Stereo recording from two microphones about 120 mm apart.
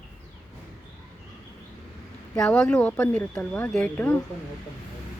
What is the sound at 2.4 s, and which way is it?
Speech, 5° left (ahead or behind).